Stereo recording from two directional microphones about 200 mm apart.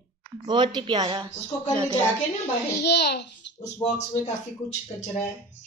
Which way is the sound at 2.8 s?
55° left (ahead or behind).